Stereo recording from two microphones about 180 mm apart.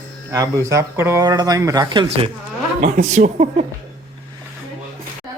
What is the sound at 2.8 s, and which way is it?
Speech, 45° right (ahead or behind).